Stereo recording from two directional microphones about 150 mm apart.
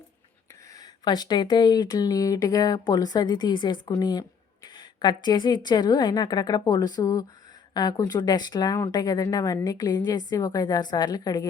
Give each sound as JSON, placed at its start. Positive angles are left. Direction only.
{"t": 0.8, "sound": "speech", "side_deg": 25}